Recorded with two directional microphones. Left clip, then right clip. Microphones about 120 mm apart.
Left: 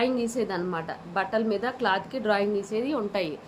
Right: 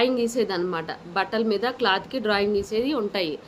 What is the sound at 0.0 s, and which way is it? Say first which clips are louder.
A woman's voice: right 4 dB; 20° right (ahead or behind).